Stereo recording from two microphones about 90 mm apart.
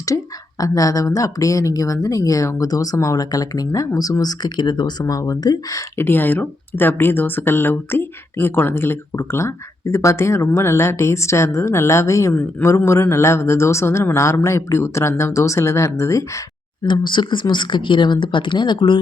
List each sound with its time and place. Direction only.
0.6 s speech: 40° left (ahead or behind)
6.0 s speech: 25° left (ahead or behind)
12.3 s speech: 20° left (ahead or behind)
12.6 s speech: 35° left (ahead or behind)
16.8 s speech: 60° left (ahead or behind)